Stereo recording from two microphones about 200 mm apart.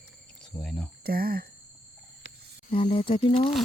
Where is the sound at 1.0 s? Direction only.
50° right (ahead or behind).